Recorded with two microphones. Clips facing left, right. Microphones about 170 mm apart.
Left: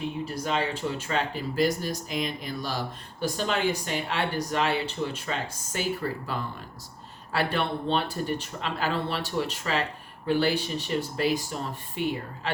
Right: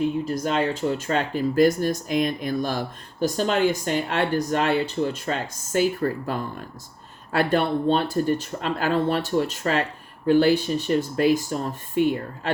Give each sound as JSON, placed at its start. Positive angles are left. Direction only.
{"t": 0.3, "sound": "speech", "side_deg": -45}